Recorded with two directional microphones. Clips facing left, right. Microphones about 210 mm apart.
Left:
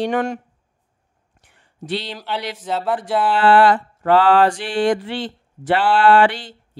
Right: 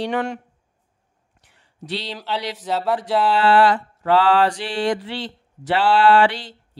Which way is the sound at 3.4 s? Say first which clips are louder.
Left 4 dB; 50° left (ahead or behind).